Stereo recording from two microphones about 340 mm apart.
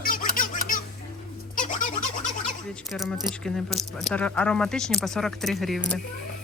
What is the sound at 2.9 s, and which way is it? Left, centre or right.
Speech, centre.